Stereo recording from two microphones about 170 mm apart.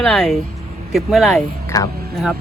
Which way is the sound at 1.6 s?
20° left (ahead or behind).